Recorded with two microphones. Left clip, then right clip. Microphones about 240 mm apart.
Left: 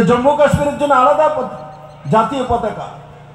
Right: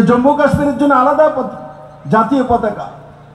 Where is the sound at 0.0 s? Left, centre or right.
Left.